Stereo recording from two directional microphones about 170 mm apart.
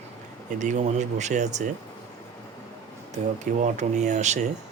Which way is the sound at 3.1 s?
45° right (ahead or behind).